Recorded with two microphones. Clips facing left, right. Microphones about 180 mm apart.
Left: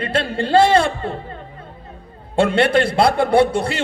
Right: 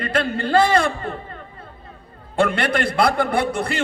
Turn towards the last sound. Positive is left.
turn(degrees=25)  # may be behind; listen again after turning